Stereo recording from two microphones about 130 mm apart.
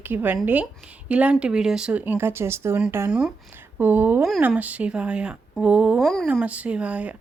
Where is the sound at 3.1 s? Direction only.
5° right (ahead or behind).